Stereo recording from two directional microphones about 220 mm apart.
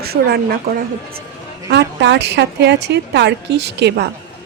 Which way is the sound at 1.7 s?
50° right (ahead or behind).